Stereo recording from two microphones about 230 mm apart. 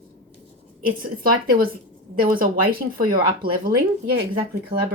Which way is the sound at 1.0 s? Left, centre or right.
Right.